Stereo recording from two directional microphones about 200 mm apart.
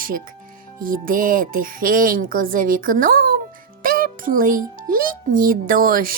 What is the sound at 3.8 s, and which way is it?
Music, 45° right (ahead or behind).